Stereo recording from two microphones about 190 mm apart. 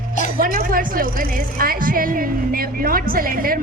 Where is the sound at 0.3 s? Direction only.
50° right (ahead or behind).